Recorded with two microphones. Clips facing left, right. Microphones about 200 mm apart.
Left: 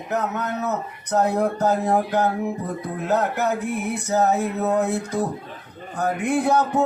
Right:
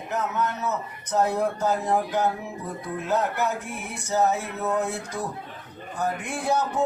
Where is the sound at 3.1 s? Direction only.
60° left (ahead or behind).